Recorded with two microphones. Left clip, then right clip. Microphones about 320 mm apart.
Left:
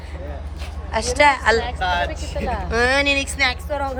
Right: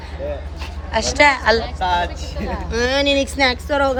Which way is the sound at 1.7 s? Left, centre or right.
Right.